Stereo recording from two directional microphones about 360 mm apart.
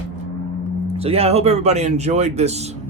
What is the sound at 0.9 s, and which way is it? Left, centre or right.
Speech, centre.